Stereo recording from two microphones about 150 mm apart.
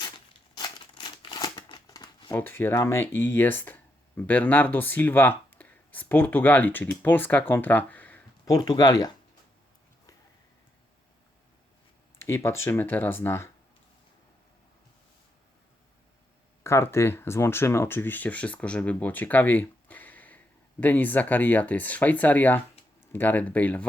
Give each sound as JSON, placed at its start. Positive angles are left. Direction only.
{"t": 0.5, "sound": "crumpling", "side_deg": 30}
{"t": 2.3, "sound": "speech", "side_deg": 15}
{"t": 8.4, "sound": "speech", "side_deg": 25}
{"t": 12.2, "sound": "speech", "side_deg": 15}
{"t": 16.6, "sound": "speech", "side_deg": 20}